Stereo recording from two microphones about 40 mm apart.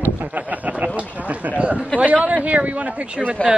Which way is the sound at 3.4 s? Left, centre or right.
Left.